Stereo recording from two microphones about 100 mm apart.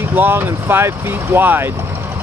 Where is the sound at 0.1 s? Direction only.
20° right (ahead or behind).